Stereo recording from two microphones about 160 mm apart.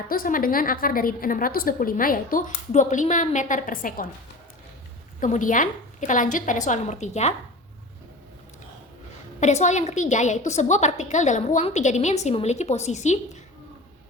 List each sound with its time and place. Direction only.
0.1 s a woman's voice: 60° left (ahead or behind)
5.2 s a woman's voice: 55° left (ahead or behind)
9.4 s a woman's voice: 45° left (ahead or behind)